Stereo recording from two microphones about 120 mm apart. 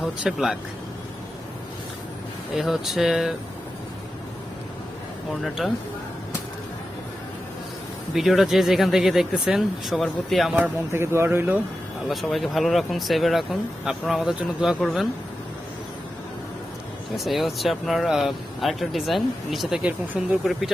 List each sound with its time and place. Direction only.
0.0 s speech: centre (ahead or behind)
2.6 s speech: 5° right (ahead or behind)
5.3 s speech: centre (ahead or behind)
8.1 s speech: centre (ahead or behind)
10.6 s speech: 20° right (ahead or behind)
12.0 s speech: centre (ahead or behind)
17.2 s speech: centre (ahead or behind)